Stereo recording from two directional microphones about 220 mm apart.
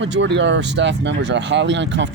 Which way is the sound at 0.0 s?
55° right (ahead or behind).